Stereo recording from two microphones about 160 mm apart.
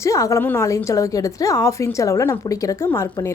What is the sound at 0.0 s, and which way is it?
A woman's voice, 20° left (ahead or behind).